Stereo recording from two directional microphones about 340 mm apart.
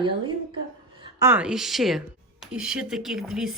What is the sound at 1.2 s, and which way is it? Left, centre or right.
A woman's voice, centre.